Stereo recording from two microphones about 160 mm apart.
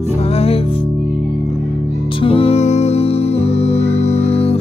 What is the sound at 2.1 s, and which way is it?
Music, 35° left (ahead or behind).